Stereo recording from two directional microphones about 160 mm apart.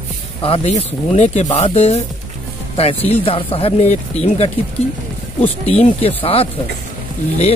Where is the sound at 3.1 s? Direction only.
35° left (ahead or behind).